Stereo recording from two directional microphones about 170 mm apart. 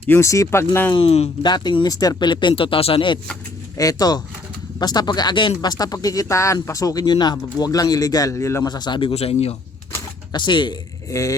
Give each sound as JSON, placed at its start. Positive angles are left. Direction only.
{"t": 0.1, "sound": "speech", "side_deg": 15}
{"t": 0.9, "sound": "speech", "side_deg": 35}